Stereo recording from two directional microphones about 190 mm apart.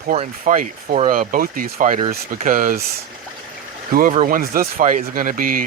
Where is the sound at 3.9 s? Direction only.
45° right (ahead or behind).